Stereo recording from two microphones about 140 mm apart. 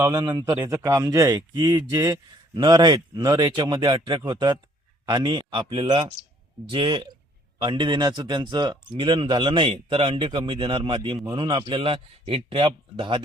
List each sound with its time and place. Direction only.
0.0 s a man's voice: 30° right (ahead or behind)